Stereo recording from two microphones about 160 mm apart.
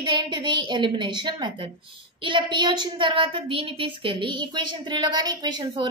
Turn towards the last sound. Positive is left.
turn(degrees=-25)  # may be behind; listen again after turning